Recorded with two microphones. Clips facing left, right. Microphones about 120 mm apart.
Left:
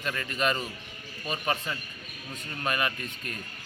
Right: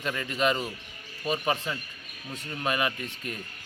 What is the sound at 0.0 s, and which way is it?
A man's voice, 15° right (ahead or behind).